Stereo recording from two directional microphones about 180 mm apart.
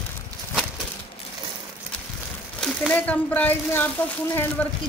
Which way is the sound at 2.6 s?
5° left (ahead or behind).